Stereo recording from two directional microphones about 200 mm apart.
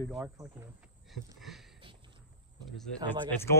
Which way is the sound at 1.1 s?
Centre (ahead or behind).